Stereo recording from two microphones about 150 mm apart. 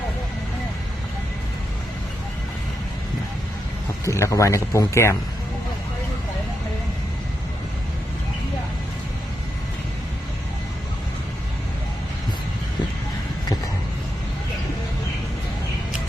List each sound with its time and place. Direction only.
4.0 s speech: 20° left (ahead or behind)